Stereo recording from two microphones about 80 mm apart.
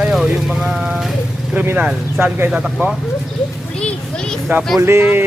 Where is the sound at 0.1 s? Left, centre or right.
Centre.